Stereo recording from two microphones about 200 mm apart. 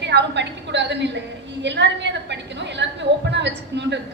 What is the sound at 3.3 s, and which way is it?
Speech, 60° right (ahead or behind).